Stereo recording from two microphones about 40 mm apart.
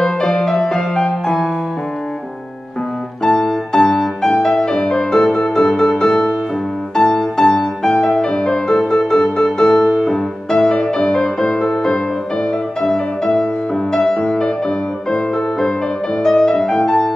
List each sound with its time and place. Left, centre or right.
0.0 s music: centre
3.3 s music: centre
15.0 s music: centre